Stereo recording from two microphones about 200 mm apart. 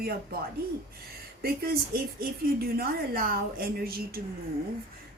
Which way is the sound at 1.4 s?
50° right (ahead or behind).